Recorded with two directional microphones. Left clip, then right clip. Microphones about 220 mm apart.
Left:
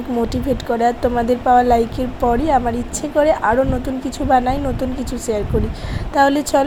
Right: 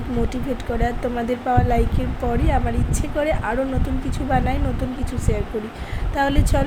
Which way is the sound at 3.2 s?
20° left (ahead or behind).